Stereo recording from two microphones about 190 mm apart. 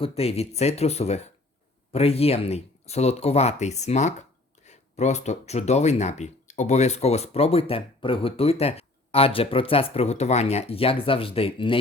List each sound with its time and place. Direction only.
0.0 s speech: 30° left (ahead or behind)